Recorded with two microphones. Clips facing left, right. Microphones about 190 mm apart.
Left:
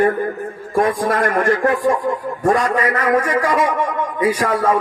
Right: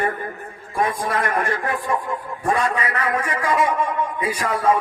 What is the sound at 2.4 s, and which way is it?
A man's voice, 45° left (ahead or behind).